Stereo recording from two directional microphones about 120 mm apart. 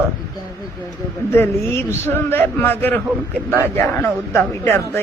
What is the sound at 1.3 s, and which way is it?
A man's voice, 15° left (ahead or behind).